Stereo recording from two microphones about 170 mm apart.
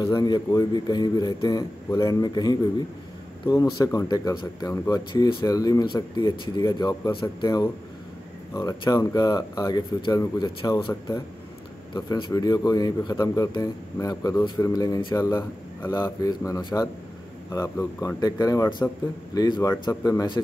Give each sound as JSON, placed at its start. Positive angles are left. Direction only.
{"t": 0.0, "sound": "speech", "side_deg": 25}